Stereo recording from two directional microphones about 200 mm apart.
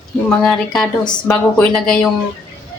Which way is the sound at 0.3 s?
5° left (ahead or behind).